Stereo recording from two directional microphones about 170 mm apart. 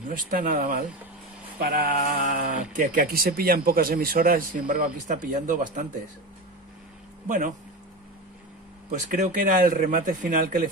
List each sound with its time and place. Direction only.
0.3 s speech: 50° right (ahead or behind)
1.6 s speech: 60° right (ahead or behind)
7.2 s speech: 50° right (ahead or behind)
9.1 s speech: 50° right (ahead or behind)